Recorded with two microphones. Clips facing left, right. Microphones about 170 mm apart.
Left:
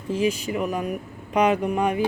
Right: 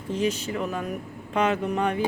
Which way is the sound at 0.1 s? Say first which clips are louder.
Left 3 dB; 10° left (ahead or behind).